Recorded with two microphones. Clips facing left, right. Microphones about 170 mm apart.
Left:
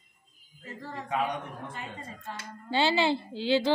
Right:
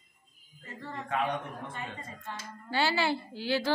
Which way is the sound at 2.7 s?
20° left (ahead or behind).